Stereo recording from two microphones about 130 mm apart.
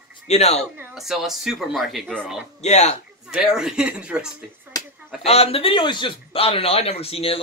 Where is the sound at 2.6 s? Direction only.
60° left (ahead or behind).